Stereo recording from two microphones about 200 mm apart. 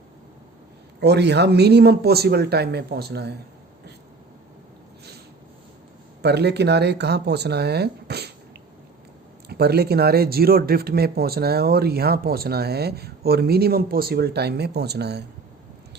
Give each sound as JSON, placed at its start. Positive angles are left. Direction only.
{"t": 1.0, "sound": "speech", "side_deg": -55}
{"t": 6.2, "sound": "speech", "side_deg": -55}
{"t": 9.5, "sound": "speech", "side_deg": -55}